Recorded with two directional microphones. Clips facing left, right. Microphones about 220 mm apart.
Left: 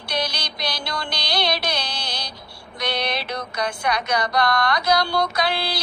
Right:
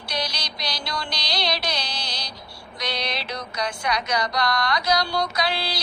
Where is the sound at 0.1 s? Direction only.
55° left (ahead or behind).